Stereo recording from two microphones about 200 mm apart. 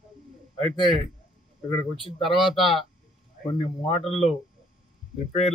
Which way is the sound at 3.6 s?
30° left (ahead or behind).